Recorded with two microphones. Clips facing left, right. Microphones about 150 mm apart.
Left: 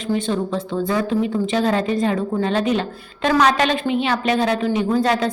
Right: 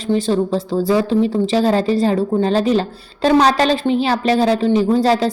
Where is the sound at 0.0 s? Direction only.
35° right (ahead or behind).